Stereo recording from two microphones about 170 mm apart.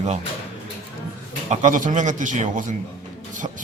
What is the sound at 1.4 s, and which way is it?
Speech, 50° right (ahead or behind).